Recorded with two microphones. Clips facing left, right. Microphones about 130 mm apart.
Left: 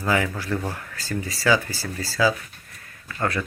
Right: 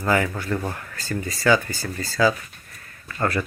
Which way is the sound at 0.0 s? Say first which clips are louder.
Right 2 dB; centre (ahead or behind).